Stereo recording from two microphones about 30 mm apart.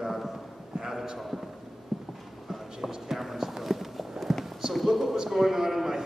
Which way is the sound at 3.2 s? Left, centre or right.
Centre.